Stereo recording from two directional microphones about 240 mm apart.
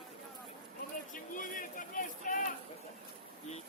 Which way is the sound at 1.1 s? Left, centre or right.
Left.